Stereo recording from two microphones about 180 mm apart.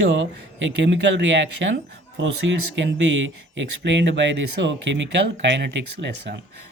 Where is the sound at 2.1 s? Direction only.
90° right.